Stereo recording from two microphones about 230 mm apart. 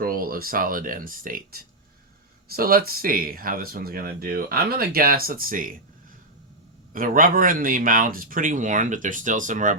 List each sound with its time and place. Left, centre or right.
0.0 s speech: right
6.9 s speech: right